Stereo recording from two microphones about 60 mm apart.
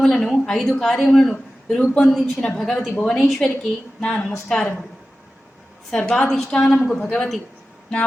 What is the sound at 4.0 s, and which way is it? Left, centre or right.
Speech, centre.